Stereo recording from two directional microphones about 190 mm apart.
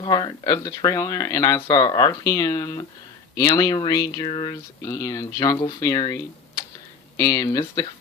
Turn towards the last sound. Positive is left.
turn(degrees=20)  # may be behind; listen again after turning